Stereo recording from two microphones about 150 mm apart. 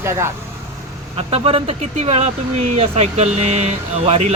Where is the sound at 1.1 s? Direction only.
40° right (ahead or behind).